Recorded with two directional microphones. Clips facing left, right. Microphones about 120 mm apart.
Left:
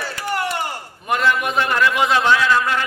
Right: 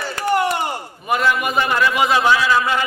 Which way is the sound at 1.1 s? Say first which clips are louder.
Right 1 dB; 5° right (ahead or behind).